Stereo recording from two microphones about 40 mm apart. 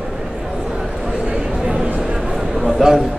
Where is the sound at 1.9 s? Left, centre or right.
Right.